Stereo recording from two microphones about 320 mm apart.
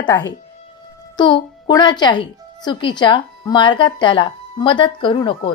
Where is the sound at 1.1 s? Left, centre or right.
Centre.